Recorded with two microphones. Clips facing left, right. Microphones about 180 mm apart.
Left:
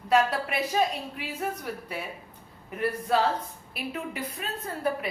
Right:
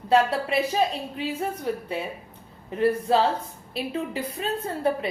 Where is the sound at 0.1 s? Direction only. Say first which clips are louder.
Right 3 dB; 25° right (ahead or behind).